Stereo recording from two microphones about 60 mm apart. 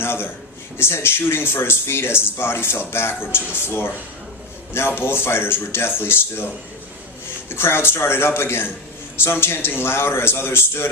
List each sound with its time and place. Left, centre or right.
0.0 s a man's voice: left
7.5 s a man's voice: left